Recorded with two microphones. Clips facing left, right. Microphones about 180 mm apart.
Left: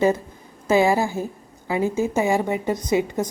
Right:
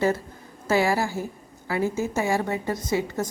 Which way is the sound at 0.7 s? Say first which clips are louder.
Left 4 dB; 20° left (ahead or behind).